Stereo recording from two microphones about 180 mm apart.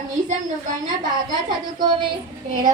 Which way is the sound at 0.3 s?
45° right (ahead or behind).